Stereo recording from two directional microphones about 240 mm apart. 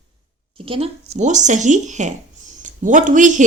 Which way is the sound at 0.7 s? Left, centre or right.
Right.